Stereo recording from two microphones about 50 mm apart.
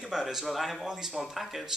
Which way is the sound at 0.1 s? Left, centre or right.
Centre.